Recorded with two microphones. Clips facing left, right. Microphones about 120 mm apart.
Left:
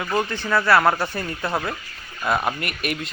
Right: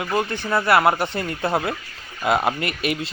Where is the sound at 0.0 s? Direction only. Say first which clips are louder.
Right 1 dB; 5° right (ahead or behind).